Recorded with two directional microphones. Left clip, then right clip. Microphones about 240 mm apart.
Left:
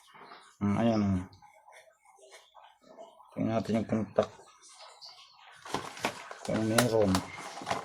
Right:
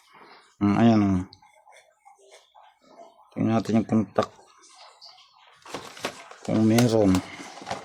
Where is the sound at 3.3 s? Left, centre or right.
Right.